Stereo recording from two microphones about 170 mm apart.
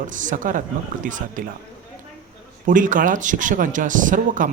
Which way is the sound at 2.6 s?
50° right (ahead or behind).